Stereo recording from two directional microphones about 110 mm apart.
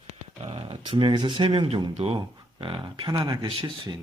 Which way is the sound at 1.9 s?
65° right (ahead or behind).